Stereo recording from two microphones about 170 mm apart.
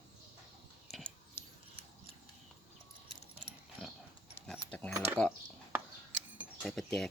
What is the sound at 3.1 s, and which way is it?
Ratchet, 35° right (ahead or behind).